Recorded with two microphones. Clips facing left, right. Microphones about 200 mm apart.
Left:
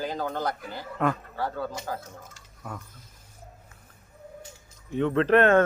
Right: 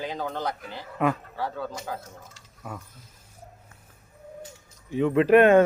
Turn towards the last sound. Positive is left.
turn(degrees=-10)  # may be behind; listen again after turning